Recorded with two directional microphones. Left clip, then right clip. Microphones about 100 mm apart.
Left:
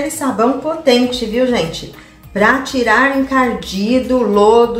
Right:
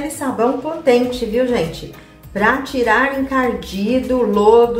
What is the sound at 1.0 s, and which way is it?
A woman's voice, 20° right (ahead or behind).